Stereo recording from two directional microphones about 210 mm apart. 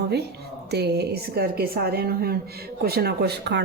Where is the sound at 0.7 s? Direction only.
50° right (ahead or behind).